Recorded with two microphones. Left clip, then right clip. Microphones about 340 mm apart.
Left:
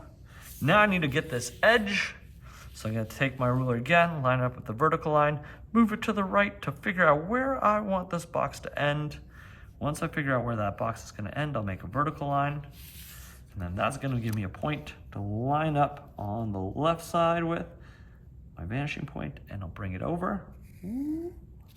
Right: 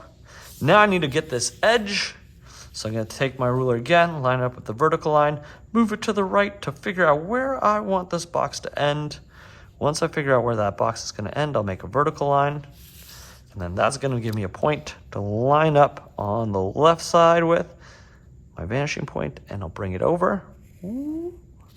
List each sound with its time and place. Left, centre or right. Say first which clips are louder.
0.3 s speech: right 7 dB; centre